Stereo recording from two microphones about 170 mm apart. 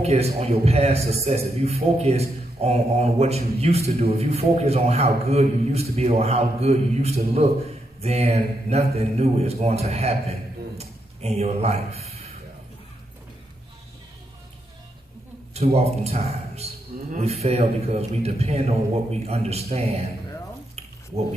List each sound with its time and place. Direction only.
0.0 s a man's voice: 40° right (ahead or behind)
15.5 s a man's voice: 35° right (ahead or behind)